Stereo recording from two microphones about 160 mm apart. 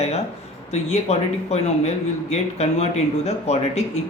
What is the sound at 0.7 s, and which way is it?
Speech, 45° left (ahead or behind).